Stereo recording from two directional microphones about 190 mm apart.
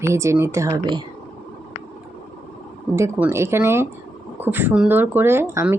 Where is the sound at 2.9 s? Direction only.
15° right (ahead or behind).